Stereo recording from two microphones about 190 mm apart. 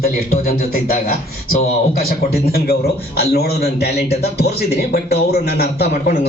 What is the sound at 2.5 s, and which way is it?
Speech, 55° left (ahead or behind).